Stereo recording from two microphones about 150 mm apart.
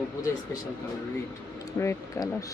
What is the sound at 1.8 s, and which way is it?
Speech, 20° left (ahead or behind).